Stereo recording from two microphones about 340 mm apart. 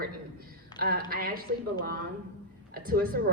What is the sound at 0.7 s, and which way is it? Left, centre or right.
Speech, right.